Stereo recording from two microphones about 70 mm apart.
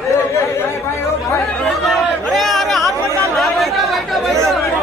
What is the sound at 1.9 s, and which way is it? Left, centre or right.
Chatter, centre.